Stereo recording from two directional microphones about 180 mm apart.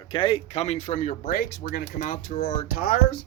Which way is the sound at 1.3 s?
55° left (ahead or behind).